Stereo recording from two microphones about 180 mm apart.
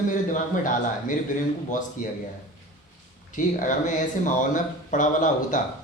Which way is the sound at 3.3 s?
45° left (ahead or behind).